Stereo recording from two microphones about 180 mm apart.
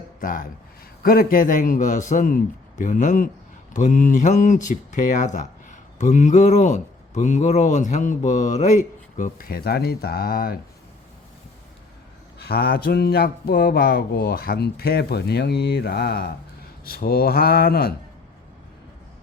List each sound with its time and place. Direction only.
0.2 s speech: 50° left (ahead or behind)
12.4 s speech: 60° left (ahead or behind)